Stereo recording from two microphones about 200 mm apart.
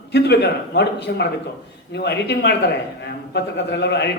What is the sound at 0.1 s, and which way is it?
A man's voice, 55° left (ahead or behind).